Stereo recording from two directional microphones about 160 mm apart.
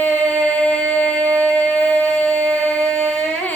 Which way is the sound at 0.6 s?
5° left (ahead or behind).